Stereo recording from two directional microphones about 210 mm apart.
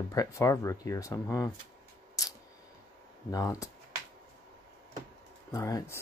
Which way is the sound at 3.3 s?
15° left (ahead or behind).